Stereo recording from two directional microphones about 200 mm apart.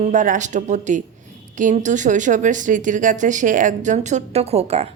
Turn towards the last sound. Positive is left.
turn(degrees=-30)  # may be behind; listen again after turning